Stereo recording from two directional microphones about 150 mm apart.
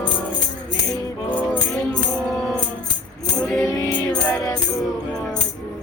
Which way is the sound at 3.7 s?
25° left (ahead or behind).